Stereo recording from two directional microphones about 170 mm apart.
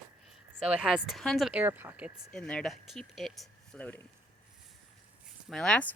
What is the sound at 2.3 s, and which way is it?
Speech, 5° left (ahead or behind).